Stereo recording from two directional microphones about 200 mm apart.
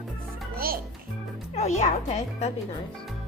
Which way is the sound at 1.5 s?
35° left (ahead or behind).